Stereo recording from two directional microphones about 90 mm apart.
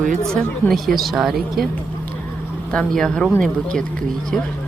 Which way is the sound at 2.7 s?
10° left (ahead or behind).